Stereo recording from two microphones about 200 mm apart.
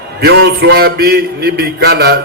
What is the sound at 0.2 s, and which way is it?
A man's voice, 60° right (ahead or behind).